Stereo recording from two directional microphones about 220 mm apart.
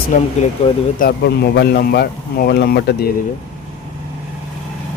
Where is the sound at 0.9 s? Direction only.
45° left (ahead or behind).